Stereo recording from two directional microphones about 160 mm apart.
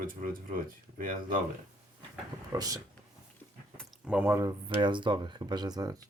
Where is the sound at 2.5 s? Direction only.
25° right (ahead or behind).